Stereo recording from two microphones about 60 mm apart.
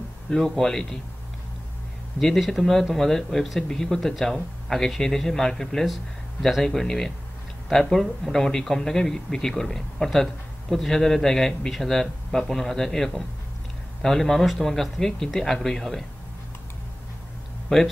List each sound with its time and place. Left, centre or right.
0.3 s a man's voice: centre
2.1 s a man's voice: centre
17.7 s a man's voice: centre